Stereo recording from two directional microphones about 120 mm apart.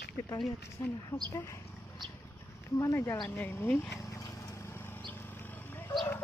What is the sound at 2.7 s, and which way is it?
Speech, 25° left (ahead or behind).